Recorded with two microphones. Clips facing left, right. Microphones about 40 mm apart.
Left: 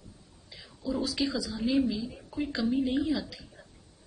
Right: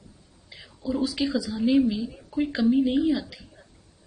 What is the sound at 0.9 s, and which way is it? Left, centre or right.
Speech, centre.